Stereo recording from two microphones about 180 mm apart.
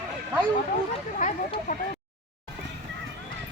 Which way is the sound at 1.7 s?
45° left (ahead or behind).